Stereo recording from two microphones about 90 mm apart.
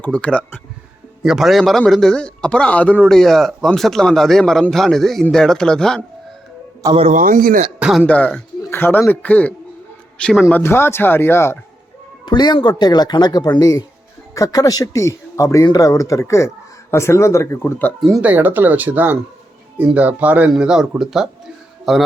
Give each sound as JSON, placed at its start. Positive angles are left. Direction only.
{"t": 0.0, "sound": "speech", "side_deg": 10}
{"t": 1.2, "sound": "speech", "side_deg": -5}
{"t": 6.8, "sound": "a man's voice", "side_deg": -40}
{"t": 7.8, "sound": "throat clearing", "side_deg": -5}
{"t": 8.0, "sound": "speech", "side_deg": 15}
{"t": 12.2, "sound": "a man's voice", "side_deg": 55}
{"t": 18.2, "sound": "speech", "side_deg": -20}
{"t": 20.5, "sound": "speech", "side_deg": -5}
{"t": 21.0, "sound": "a sound", "side_deg": -5}